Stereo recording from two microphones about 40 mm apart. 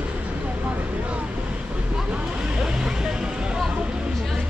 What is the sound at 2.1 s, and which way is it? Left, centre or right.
Vehicle, centre.